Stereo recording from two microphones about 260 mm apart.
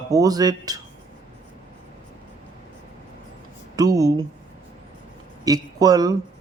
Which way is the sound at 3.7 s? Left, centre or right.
Centre.